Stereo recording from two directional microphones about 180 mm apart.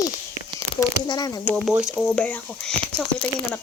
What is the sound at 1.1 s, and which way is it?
Speech, 20° left (ahead or behind).